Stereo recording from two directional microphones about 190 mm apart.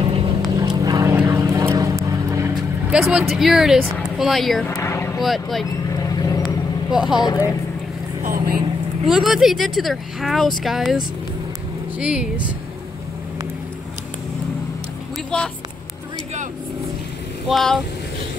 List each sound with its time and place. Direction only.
0.0 s vehicle: 30° right (ahead or behind)
2.9 s speech: 5° right (ahead or behind)
4.6 s vehicle: 15° left (ahead or behind)
5.2 s speech: centre (ahead or behind)
5.9 s vehicle: 15° left (ahead or behind)
6.9 s speech: 5° right (ahead or behind)
7.2 s speech: 20° left (ahead or behind)
8.2 s vehicle: 50° right (ahead or behind)
9.0 s speech: centre (ahead or behind)
15.3 s speech: 5° left (ahead or behind)
17.5 s speech: centre (ahead or behind)